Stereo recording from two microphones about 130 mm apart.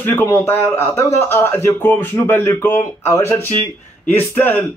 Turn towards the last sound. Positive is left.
turn(degrees=15)  # may be behind; listen again after turning